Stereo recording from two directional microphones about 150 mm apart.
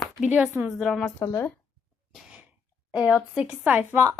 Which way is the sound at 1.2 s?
20° left (ahead or behind).